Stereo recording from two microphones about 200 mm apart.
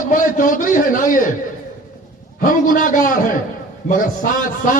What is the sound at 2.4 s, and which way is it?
A man's voice, 45° left (ahead or behind).